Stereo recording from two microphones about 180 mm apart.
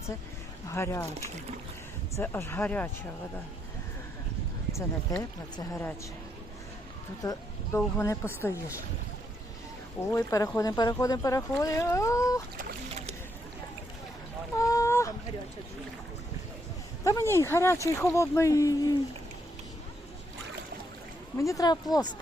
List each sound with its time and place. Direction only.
0.7 s speech: 15° left (ahead or behind)
2.1 s speech: 10° left (ahead or behind)
4.7 s speech: 20° left (ahead or behind)
7.2 s speech: 20° left (ahead or behind)
10.1 s speech: 15° left (ahead or behind)
14.5 s boat: 20° left (ahead or behind)
17.0 s speech: 15° left (ahead or behind)
21.3 s speech: 20° left (ahead or behind)